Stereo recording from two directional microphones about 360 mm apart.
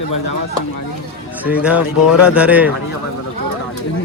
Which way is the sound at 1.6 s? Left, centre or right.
Centre.